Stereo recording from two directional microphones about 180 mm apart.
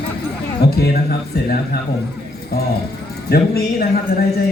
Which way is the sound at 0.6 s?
60° left (ahead or behind).